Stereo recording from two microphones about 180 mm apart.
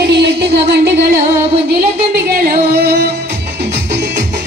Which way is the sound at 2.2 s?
55° right (ahead or behind).